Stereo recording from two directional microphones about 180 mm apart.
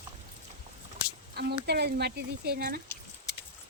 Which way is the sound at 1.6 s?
65° right (ahead or behind).